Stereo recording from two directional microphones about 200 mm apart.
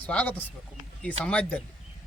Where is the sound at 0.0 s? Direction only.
5° left (ahead or behind).